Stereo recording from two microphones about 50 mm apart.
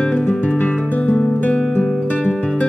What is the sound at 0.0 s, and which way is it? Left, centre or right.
Music, left.